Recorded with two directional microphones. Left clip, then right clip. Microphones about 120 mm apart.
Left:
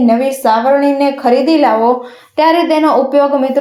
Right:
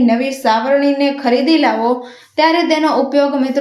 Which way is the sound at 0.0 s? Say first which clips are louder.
Left 3 dB; 5° left (ahead or behind).